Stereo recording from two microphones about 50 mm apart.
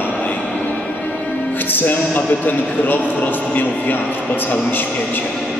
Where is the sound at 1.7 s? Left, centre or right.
Left.